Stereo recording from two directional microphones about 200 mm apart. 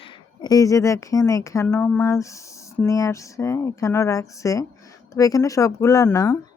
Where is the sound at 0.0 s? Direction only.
20° left (ahead or behind).